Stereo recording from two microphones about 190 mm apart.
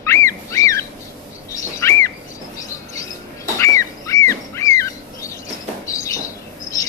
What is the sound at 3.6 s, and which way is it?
Bird, 15° left (ahead or behind).